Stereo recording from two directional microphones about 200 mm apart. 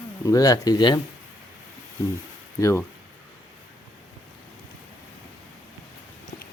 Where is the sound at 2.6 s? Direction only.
15° left (ahead or behind).